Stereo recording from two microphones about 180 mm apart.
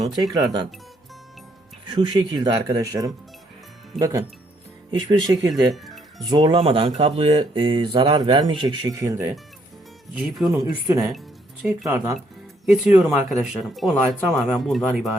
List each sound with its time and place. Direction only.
2.0 s speech: 25° right (ahead or behind)
5.7 s music: centre (ahead or behind)
6.2 s speech: 25° right (ahead or behind)
10.2 s speech: centre (ahead or behind)
10.5 s speech: 20° right (ahead or behind)
11.6 s speech: 5° right (ahead or behind)